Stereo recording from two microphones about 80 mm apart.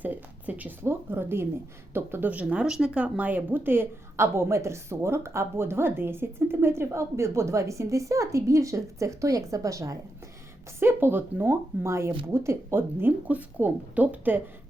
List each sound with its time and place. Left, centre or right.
0.0 s a sound: right
0.9 s speech: right
10.8 s speech: right